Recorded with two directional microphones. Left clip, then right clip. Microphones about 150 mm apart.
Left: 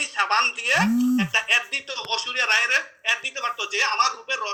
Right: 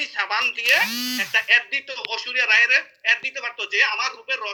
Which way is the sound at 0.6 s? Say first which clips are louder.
Right 2 dB; 10° left (ahead or behind).